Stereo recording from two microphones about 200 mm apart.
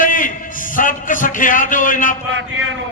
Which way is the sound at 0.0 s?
40° left (ahead or behind).